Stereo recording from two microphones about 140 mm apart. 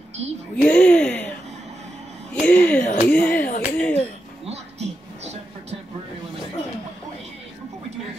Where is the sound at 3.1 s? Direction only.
10° left (ahead or behind).